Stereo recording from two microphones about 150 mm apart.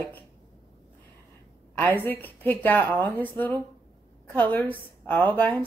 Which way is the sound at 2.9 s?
25° right (ahead or behind).